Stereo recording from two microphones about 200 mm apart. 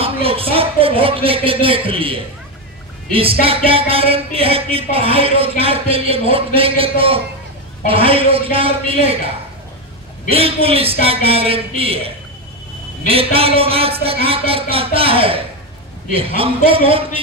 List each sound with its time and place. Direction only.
0.0 s speech: 30° right (ahead or behind)
10.3 s speech: 30° right (ahead or behind)
13.1 s speech: 30° right (ahead or behind)